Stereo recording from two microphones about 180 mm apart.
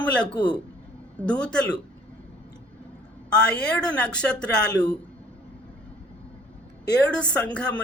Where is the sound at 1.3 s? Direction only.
5° left (ahead or behind).